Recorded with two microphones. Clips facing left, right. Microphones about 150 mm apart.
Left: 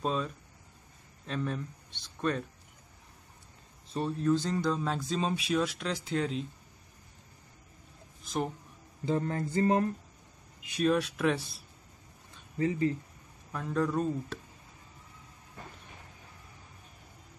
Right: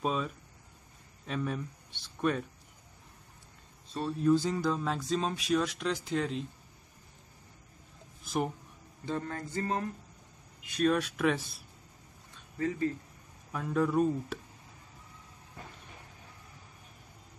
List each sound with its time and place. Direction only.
0.0 s speech: 5° right (ahead or behind)
4.2 s speech: 10° right (ahead or behind)
8.3 s speech: 5° right (ahead or behind)
9.1 s mantra: 25° left (ahead or behind)
10.8 s speech: centre (ahead or behind)
12.5 s mantra: 20° left (ahead or behind)
13.5 s speech: 5° right (ahead or behind)